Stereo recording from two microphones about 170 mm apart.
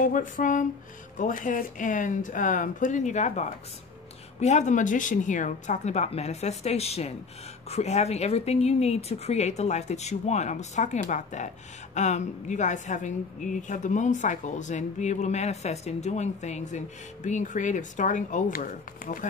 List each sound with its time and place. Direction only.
0.0 s speech: 50° left (ahead or behind)